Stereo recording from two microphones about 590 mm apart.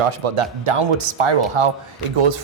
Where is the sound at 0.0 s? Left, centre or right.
Right.